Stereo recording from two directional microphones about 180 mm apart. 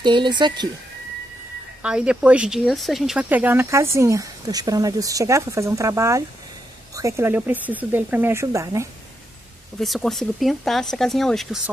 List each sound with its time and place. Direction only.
0.0 s speech: 25° right (ahead or behind)
1.8 s speech: 5° right (ahead or behind)
9.8 s speech: centre (ahead or behind)